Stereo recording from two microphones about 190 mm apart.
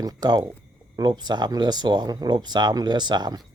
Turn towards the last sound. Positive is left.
turn(degrees=-20)  # may be behind; listen again after turning